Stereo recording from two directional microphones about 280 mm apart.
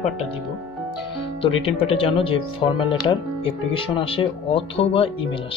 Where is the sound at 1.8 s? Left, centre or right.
Centre.